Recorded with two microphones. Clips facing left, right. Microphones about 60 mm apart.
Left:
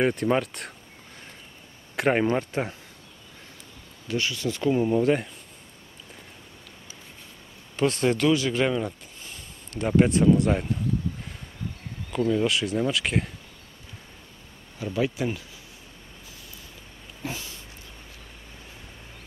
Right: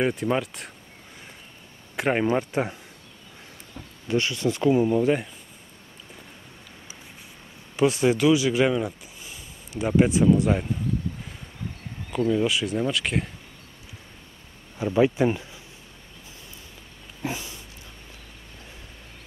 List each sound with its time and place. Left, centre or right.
0.0 s speech: centre
2.0 s speech: centre
2.5 s speech: centre
4.1 s speech: right
4.6 s speech: centre
7.7 s speech: centre
12.1 s speech: centre
14.8 s speech: right
17.2 s dog: right